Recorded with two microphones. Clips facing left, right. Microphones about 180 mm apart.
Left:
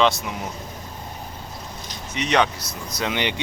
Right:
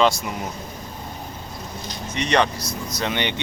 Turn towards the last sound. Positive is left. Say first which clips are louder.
# even
turn(degrees=5)  # may be behind; listen again after turning